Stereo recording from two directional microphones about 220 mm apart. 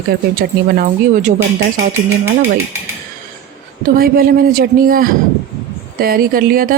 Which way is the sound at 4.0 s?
40° right (ahead or behind).